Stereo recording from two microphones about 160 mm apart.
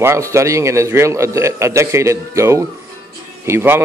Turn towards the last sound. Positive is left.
turn(degrees=-15)  # may be behind; listen again after turning